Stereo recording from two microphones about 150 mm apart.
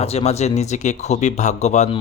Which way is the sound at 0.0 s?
45° left (ahead or behind).